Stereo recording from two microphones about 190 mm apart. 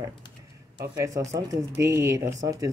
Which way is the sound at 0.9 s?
15° right (ahead or behind).